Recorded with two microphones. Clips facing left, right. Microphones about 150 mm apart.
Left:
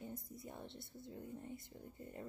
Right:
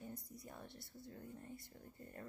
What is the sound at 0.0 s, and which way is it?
Speech, 25° left (ahead or behind).